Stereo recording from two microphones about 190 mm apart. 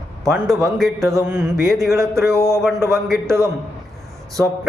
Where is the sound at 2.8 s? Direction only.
Centre (ahead or behind).